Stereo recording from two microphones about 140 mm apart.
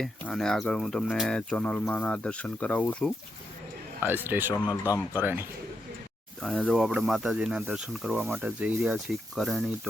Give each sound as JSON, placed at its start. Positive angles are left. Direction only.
{"t": 0.0, "sound": "speech", "side_deg": 5}
{"t": 4.0, "sound": "speech", "side_deg": -15}
{"t": 4.7, "sound": "speech", "side_deg": 25}
{"t": 5.2, "sound": "speech", "side_deg": -15}
{"t": 6.4, "sound": "speech", "side_deg": 5}